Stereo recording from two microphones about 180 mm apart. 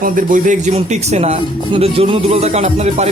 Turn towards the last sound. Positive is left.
turn(degrees=-40)  # may be behind; listen again after turning